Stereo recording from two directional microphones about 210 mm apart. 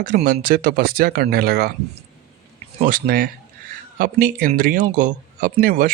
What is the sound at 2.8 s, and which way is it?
Speech, 45° right (ahead or behind).